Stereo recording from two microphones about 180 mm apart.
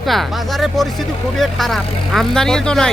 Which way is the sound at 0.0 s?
Centre (ahead or behind).